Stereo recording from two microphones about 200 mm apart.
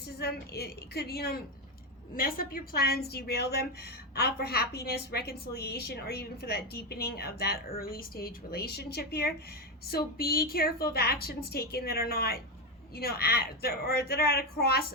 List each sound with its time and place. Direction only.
0.2 s a woman's voice: 55° left (ahead or behind)